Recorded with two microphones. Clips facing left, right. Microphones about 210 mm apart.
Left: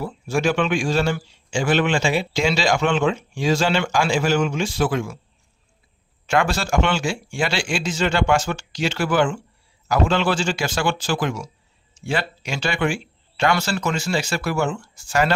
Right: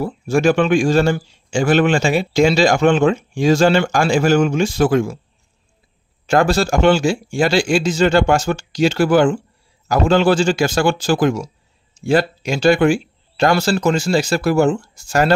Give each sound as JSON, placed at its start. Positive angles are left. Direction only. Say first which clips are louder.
{"t": 0.0, "sound": "speech", "louder": "right 6 dB", "side_deg": -45}
{"t": 6.2, "sound": "speech", "louder": "right 6 dB", "side_deg": -35}